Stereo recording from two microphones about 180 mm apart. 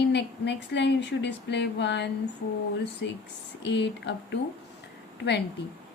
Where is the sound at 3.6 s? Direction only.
75° left (ahead or behind).